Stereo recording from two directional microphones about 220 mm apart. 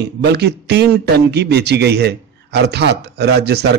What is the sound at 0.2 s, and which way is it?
A man's voice, 50° right (ahead or behind).